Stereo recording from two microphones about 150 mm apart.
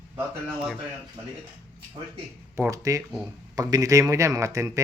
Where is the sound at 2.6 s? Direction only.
20° right (ahead or behind).